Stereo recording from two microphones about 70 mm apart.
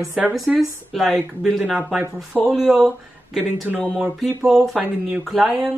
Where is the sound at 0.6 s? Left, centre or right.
Centre.